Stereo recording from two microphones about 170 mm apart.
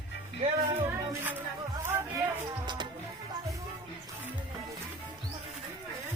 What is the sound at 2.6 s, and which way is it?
Music, 25° right (ahead or behind).